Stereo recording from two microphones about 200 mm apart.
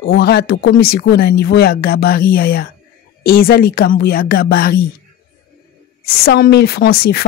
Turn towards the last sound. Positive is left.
turn(degrees=50)  # may be behind; listen again after turning